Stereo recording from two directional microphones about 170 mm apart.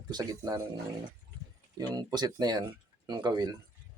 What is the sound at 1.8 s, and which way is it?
Speech, 25° right (ahead or behind).